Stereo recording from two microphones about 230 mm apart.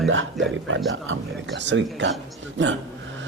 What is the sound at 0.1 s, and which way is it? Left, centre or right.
A man's voice, right.